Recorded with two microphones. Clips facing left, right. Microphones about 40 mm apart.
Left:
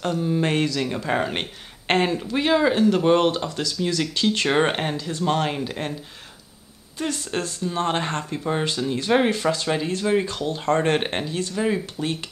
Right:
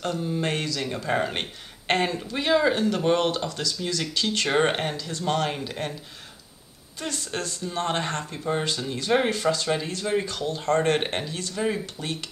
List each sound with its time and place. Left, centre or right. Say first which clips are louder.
0.2 s speech: left 5 dB; centre
0.7 s speech: left 2 dB; centre
4.6 s speech: left 2 dB; centre
7.0 s speech: left 4 dB; left